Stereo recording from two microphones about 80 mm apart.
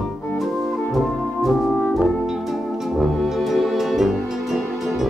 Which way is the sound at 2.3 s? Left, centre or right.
Centre.